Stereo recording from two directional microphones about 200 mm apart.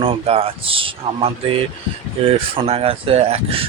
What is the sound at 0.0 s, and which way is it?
Speech, 30° right (ahead or behind).